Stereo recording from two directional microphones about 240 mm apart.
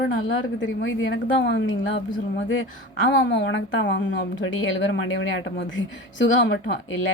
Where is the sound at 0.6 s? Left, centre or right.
Left.